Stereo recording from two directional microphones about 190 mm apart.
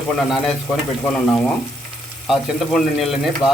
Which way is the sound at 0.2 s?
Centre (ahead or behind).